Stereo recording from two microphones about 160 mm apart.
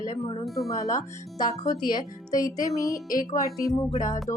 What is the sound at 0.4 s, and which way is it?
Speech, centre (ahead or behind).